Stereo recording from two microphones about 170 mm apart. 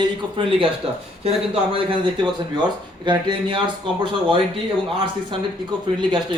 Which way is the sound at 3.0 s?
25° right (ahead or behind).